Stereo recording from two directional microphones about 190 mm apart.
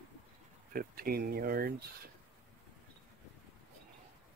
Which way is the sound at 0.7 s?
50° right (ahead or behind).